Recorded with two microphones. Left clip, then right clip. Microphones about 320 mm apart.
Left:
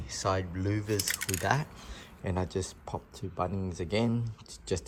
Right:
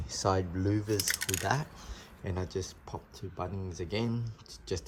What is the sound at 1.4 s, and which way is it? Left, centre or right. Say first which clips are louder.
Speech: left 6 dB; centre.